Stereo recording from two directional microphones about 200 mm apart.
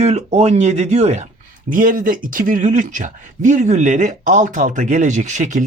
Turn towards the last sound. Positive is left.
turn(degrees=-35)  # may be behind; listen again after turning